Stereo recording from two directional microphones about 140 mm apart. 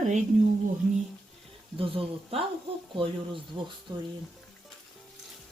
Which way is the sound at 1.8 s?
40° right (ahead or behind).